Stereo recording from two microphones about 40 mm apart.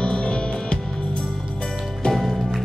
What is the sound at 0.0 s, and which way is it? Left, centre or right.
Music, left.